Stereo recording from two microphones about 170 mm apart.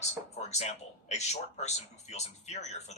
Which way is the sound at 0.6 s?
40° left (ahead or behind).